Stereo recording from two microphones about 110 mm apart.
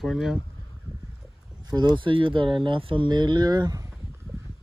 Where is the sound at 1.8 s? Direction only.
45° right (ahead or behind).